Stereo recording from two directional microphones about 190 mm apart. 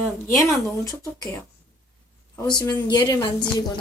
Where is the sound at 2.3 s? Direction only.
20° left (ahead or behind).